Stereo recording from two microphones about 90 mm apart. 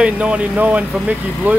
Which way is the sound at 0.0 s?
15° right (ahead or behind).